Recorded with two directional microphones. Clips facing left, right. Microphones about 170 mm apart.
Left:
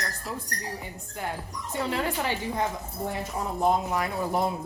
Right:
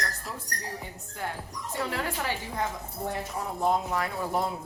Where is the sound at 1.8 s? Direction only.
20° left (ahead or behind).